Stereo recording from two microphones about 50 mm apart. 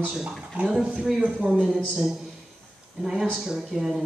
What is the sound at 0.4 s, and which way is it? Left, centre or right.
A man's voice, right.